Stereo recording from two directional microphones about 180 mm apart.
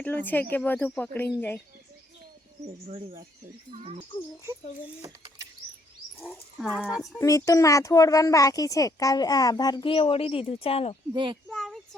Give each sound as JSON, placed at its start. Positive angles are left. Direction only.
{"t": 0.0, "sound": "speech", "side_deg": 10}
{"t": 5.0, "sound": "a sound", "side_deg": -25}
{"t": 6.6, "sound": "speech", "side_deg": 0}
{"t": 7.2, "sound": "a child's voice", "side_deg": 15}
{"t": 11.1, "sound": "a child's voice", "side_deg": -25}
{"t": 11.4, "sound": "child singing", "side_deg": 0}